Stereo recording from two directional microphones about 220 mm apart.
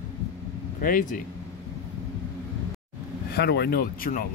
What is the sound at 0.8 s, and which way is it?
Speech, 40° left (ahead or behind).